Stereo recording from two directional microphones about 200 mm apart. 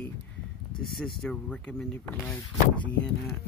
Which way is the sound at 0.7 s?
5° left (ahead or behind).